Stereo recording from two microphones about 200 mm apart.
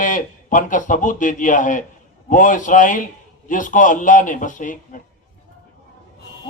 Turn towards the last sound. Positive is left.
turn(degrees=40)  # may be behind; listen again after turning